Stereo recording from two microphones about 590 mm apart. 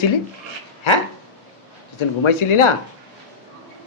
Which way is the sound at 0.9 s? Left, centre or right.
Left.